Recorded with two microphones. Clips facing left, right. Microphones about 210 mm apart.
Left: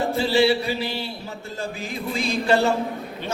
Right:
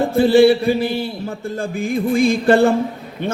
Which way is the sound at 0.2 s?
50° right (ahead or behind).